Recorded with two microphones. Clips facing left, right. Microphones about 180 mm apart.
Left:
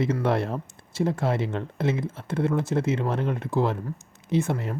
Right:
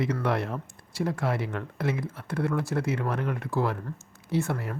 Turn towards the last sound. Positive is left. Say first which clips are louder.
# left 3 dB
turn(degrees=20)  # may be behind; listen again after turning